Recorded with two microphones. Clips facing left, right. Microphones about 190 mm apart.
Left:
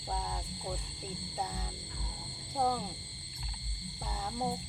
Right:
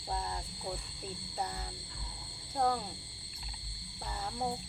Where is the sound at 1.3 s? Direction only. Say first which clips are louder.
Right 1 dB; 5° left (ahead or behind).